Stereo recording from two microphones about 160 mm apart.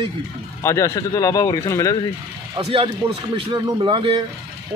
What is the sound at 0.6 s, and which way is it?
Speech, 20° left (ahead or behind).